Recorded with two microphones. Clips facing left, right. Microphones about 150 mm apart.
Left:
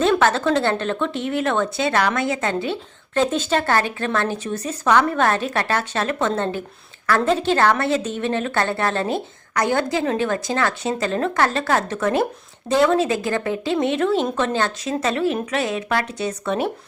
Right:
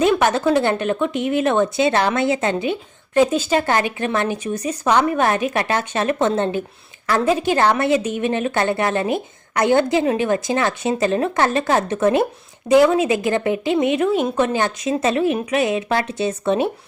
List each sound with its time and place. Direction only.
0.0 s a woman's voice: 15° right (ahead or behind)